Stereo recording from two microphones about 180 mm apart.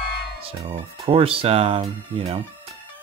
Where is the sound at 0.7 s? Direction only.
30° right (ahead or behind).